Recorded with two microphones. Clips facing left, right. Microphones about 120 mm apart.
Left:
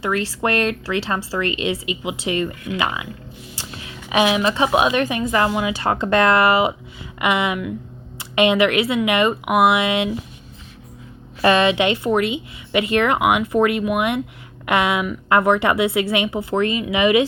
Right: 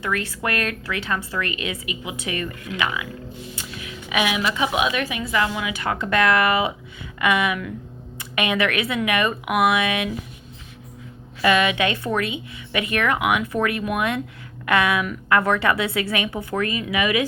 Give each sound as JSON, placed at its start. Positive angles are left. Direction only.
{"t": 0.0, "sound": "a woman's voice", "side_deg": 30}
{"t": 11.4, "sound": "speech", "side_deg": 35}